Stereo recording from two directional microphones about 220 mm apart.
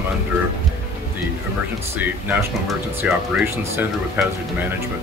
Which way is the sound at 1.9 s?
10° right (ahead or behind).